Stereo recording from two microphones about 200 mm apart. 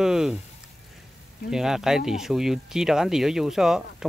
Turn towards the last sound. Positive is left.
turn(degrees=0)  # may be behind; listen again after turning